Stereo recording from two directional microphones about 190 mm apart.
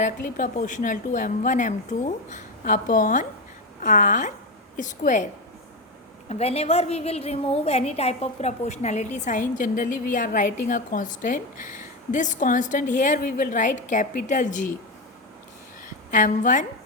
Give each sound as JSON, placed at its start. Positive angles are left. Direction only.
{"t": 0.0, "sound": "a woman's voice", "side_deg": 45}
{"t": 6.2, "sound": "a woman's voice", "side_deg": 35}
{"t": 16.1, "sound": "a woman's voice", "side_deg": 40}